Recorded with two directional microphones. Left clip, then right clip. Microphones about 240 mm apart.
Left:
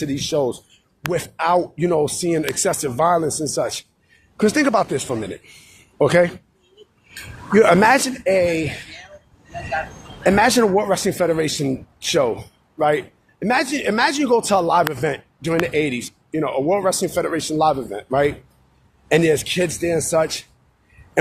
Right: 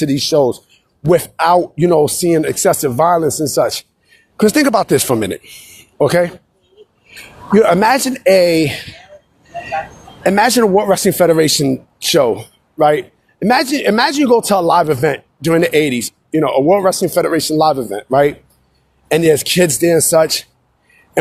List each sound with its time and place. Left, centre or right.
0.0 s a man's voice: right
7.5 s speech: right
10.2 s speech: right